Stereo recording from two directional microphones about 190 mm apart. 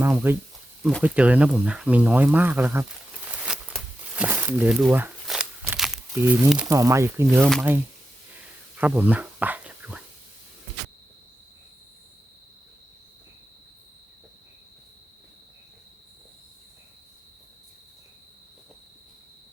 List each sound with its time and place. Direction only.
0.0 s speech: 10° right (ahead or behind)
3.3 s a sound: 5° right (ahead or behind)
6.7 s speech: 15° right (ahead or behind)
8.8 s speech: 10° right (ahead or behind)